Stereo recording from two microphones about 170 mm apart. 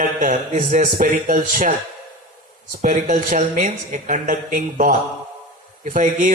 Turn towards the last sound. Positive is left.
turn(degrees=-50)  # may be behind; listen again after turning